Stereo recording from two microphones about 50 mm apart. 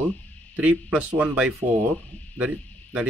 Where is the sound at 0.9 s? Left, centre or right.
Right.